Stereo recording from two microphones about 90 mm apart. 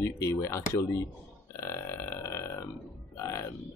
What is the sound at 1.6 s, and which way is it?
Burping, 30° left (ahead or behind).